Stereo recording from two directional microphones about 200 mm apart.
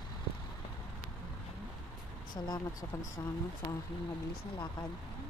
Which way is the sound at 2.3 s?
20° left (ahead or behind).